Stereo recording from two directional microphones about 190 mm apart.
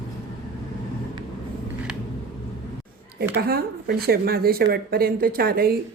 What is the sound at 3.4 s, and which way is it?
A woman's voice, 55° right (ahead or behind).